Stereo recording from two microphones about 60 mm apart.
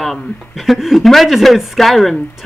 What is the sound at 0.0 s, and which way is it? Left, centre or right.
Speech, centre.